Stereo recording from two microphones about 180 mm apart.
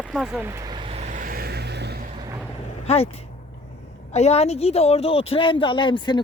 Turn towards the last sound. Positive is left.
turn(degrees=25)  # may be behind; listen again after turning